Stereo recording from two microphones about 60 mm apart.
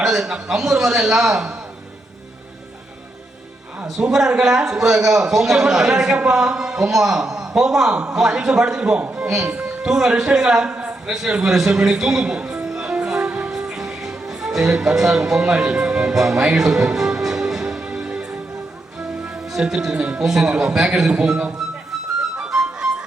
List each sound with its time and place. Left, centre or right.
0.0 s a man's voice: centre
4.1 s a man's voice: centre
9.3 s a man's voice: centre
10.7 s a sound: right
11.0 s a man's voice: centre
12.6 s music: centre
19.2 s a man's voice: centre
22.5 s music: centre